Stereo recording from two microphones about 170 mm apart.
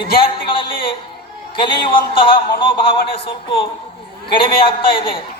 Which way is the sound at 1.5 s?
30° left (ahead or behind).